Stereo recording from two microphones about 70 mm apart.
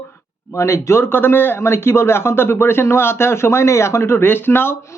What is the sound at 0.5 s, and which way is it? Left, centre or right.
A man's voice, left.